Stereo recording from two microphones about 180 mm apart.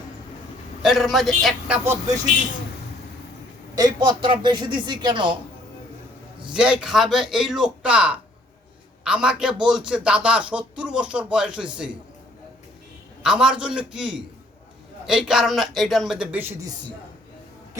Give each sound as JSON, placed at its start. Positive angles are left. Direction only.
{"t": 0.8, "sound": "speech", "side_deg": 0}
{"t": 3.8, "sound": "speech", "side_deg": -25}
{"t": 6.5, "sound": "speech", "side_deg": -5}
{"t": 13.2, "sound": "speech", "side_deg": -5}